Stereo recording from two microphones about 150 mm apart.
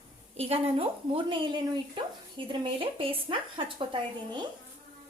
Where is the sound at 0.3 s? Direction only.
40° right (ahead or behind).